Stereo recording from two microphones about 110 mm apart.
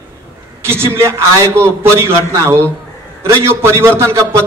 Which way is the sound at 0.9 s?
25° right (ahead or behind).